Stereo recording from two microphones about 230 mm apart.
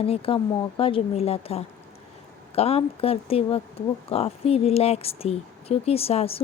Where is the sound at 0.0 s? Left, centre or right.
Left.